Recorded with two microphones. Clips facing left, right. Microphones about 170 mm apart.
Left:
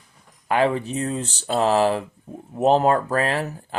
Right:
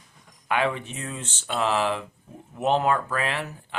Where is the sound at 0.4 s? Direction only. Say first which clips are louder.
Left 5 dB; 35° left (ahead or behind).